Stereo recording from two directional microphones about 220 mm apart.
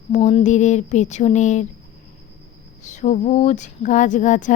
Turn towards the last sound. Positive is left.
turn(degrees=35)  # may be behind; listen again after turning